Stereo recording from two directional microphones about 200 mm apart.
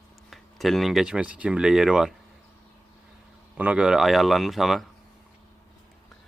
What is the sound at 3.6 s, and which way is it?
Speech, 5° right (ahead or behind).